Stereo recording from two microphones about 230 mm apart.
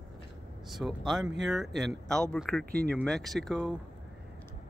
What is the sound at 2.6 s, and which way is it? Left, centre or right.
Speech, right.